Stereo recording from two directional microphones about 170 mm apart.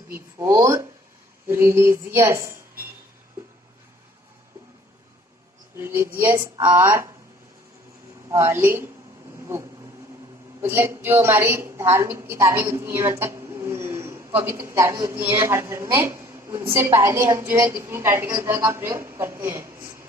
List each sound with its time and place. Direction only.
0.1 s a woman's voice: 15° right (ahead or behind)
5.7 s a woman's voice: 10° right (ahead or behind)
8.3 s a woman's voice: 15° right (ahead or behind)
10.6 s a woman's voice: 15° right (ahead or behind)